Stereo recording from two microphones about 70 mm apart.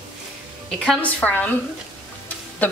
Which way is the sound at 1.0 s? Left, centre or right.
Left.